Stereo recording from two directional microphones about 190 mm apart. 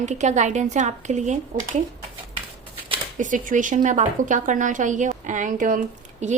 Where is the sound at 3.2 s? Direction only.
40° right (ahead or behind).